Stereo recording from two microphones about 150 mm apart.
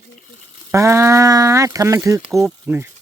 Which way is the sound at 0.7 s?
20° right (ahead or behind).